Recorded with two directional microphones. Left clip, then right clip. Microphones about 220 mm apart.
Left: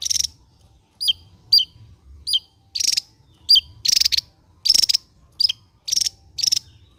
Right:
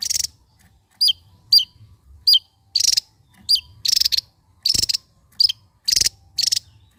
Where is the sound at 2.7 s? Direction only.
15° right (ahead or behind).